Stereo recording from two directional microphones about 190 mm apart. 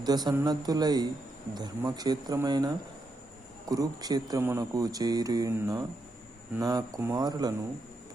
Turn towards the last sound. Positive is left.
turn(degrees=-20)  # may be behind; listen again after turning